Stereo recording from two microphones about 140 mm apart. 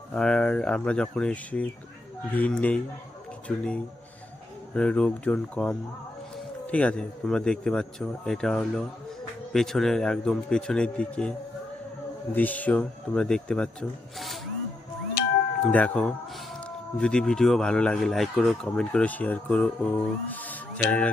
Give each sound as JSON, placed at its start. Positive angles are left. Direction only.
{"t": 0.1, "sound": "speech", "side_deg": 5}
{"t": 4.7, "sound": "speech", "side_deg": 5}
{"t": 15.2, "sound": "cat", "side_deg": 90}
{"t": 15.6, "sound": "speech", "side_deg": 10}